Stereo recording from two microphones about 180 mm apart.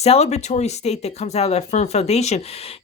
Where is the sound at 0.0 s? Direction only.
35° left (ahead or behind).